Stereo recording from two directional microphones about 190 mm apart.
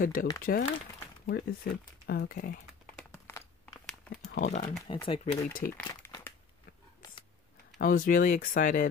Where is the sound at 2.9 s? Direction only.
15° left (ahead or behind).